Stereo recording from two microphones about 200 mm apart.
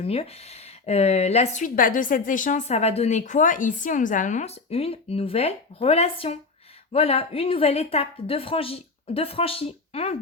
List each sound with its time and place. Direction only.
0.0 s speech: 30° left (ahead or behind)